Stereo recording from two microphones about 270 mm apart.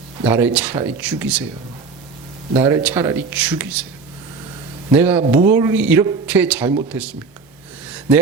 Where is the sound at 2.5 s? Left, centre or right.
Centre.